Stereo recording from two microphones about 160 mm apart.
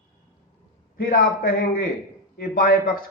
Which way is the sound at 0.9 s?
65° left (ahead or behind).